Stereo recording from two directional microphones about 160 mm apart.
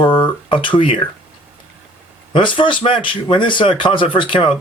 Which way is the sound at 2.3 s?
30° left (ahead or behind).